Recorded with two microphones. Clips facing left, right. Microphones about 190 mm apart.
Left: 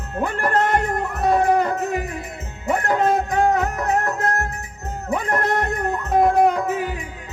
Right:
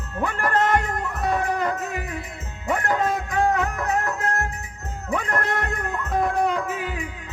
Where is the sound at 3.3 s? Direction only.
40° left (ahead or behind).